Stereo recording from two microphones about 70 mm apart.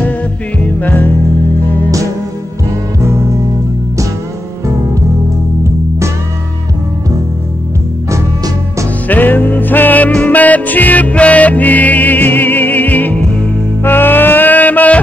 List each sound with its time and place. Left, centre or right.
0.7 s music: left
9.0 s music: left
13.8 s a sound: left